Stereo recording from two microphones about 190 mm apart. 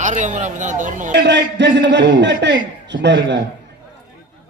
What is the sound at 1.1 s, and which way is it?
A man's voice, 65° right (ahead or behind).